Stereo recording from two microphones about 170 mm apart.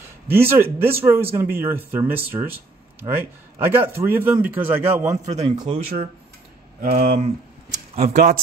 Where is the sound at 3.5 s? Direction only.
15° right (ahead or behind).